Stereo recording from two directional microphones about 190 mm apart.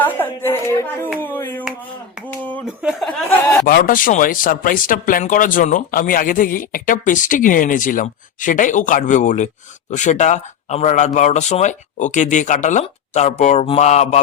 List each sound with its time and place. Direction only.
0.0 s a woman's voice: 10° left (ahead or behind)
2.6 s speech: 5° right (ahead or behind)
3.1 s a woman's voice: 10° left (ahead or behind)
3.7 s speech: 50° left (ahead or behind)